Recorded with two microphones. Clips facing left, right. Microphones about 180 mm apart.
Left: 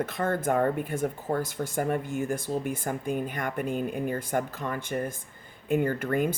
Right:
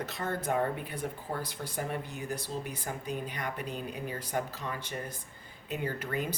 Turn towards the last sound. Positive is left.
turn(degrees=50)  # may be behind; listen again after turning